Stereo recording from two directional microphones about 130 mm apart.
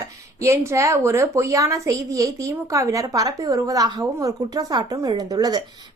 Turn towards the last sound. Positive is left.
turn(degrees=-30)  # may be behind; listen again after turning